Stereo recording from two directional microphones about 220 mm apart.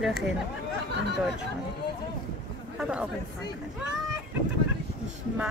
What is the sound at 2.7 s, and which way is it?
Speech, 5° right (ahead or behind).